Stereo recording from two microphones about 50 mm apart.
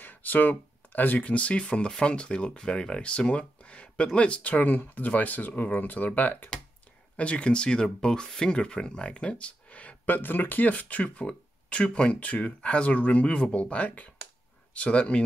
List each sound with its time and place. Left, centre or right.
0.0 s speech: left